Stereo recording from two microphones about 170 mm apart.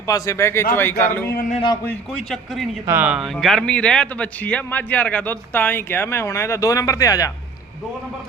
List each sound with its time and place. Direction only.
0.1 s a man's voice: 15° left (ahead or behind)
1.3 s a man's voice: 55° left (ahead or behind)
1.5 s a man's voice: 25° left (ahead or behind)
2.3 s a man's voice: centre (ahead or behind)
2.8 s a man's voice: 10° right (ahead or behind); by 7.3 s 20° left (ahead or behind)